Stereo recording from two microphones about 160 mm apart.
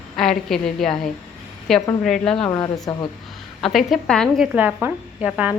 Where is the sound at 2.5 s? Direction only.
25° left (ahead or behind).